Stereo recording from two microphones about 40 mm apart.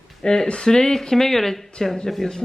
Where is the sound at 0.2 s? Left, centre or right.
Centre.